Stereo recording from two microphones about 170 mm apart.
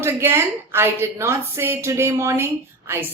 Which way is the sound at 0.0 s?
15° right (ahead or behind).